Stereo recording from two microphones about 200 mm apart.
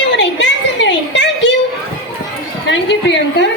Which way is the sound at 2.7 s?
65° left (ahead or behind).